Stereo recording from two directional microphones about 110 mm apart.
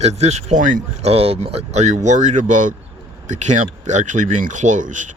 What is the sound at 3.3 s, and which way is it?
Speech, 90° right.